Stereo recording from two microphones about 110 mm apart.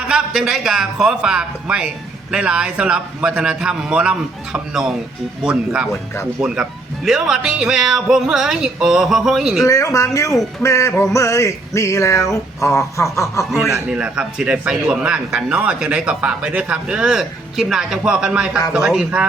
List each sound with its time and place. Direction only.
0.1 s speech: 5° right (ahead or behind)
9.6 s a sound: 30° left (ahead or behind)
13.9 s speech: 10° right (ahead or behind)